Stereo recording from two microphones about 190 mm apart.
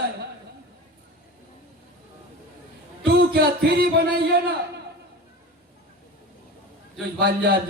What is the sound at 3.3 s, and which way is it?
Speech, 55° right (ahead or behind).